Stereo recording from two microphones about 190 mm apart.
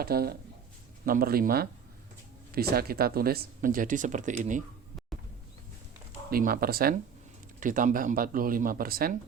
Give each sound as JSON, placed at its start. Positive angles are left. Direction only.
{"t": 0.0, "sound": "speech", "side_deg": -55}
{"t": 6.3, "sound": "speech", "side_deg": -50}